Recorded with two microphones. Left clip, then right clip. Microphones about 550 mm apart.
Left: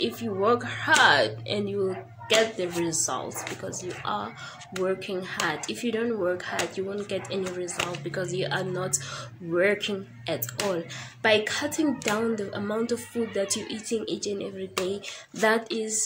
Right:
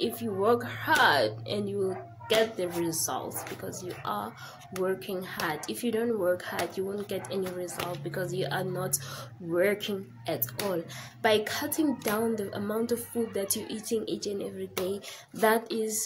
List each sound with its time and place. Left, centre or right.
0.0 s speech: right